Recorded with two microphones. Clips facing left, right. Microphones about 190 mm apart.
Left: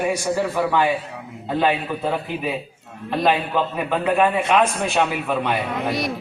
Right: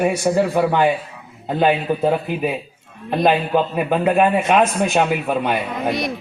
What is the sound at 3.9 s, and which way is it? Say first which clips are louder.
Speech: right 3 dB; 20° right (ahead or behind).